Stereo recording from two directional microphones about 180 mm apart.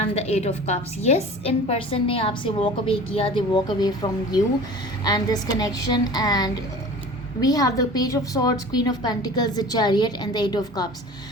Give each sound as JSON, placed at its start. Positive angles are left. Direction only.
{"t": 0.0, "sound": "a woman's voice", "side_deg": 35}